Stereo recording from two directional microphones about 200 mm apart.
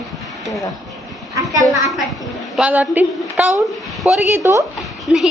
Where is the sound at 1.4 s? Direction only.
15° right (ahead or behind).